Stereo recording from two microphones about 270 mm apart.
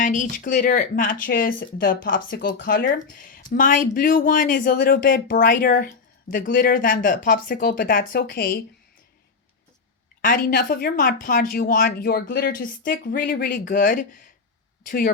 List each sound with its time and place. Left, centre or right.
0.0 s speech: left
10.2 s speech: left